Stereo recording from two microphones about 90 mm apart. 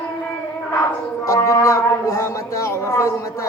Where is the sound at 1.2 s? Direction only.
35° left (ahead or behind).